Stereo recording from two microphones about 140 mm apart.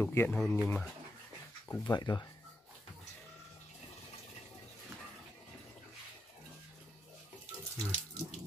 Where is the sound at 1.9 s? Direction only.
30° left (ahead or behind).